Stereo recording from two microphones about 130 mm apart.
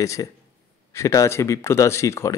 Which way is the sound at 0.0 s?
25° left (ahead or behind).